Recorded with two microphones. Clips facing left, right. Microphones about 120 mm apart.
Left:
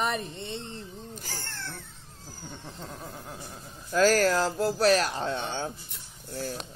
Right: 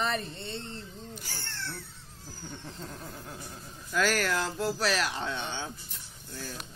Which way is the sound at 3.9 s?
40° left (ahead or behind).